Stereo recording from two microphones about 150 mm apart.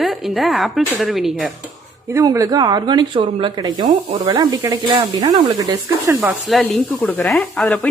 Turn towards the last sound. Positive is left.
turn(degrees=5)  # may be behind; listen again after turning